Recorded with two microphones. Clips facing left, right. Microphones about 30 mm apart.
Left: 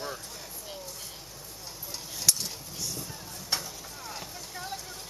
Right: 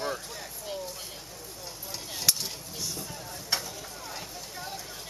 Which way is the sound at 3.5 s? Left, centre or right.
Centre.